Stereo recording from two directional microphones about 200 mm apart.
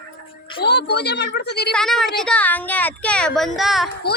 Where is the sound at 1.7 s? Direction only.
Centre (ahead or behind).